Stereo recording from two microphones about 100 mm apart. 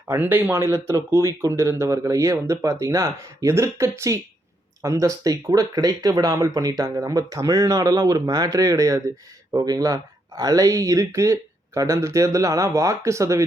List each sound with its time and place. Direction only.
0.1 s speech: 20° right (ahead or behind)